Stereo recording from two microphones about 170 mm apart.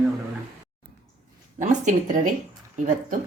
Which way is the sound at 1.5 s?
45° right (ahead or behind).